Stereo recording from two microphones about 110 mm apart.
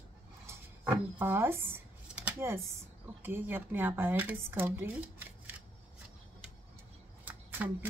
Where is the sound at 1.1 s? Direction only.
20° right (ahead or behind).